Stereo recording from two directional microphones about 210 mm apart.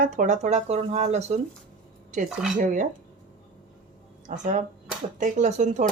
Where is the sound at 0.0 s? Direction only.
35° right (ahead or behind).